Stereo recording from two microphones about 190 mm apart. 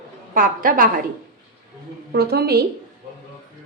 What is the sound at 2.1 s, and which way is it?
Speech, 55° right (ahead or behind).